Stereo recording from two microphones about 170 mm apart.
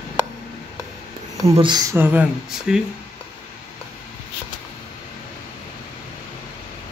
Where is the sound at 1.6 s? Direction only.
25° right (ahead or behind).